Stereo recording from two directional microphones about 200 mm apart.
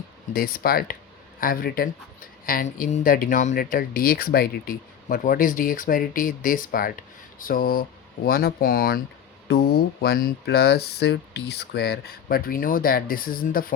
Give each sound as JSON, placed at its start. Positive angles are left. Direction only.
{"t": 0.3, "sound": "speech", "side_deg": 50}